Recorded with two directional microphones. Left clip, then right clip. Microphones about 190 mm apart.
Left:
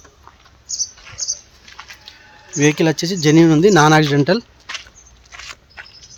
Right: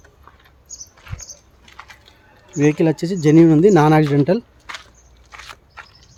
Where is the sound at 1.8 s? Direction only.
15° right (ahead or behind).